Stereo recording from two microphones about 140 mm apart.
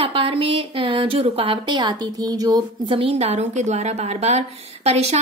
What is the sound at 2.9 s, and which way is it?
A woman's voice, 45° right (ahead or behind).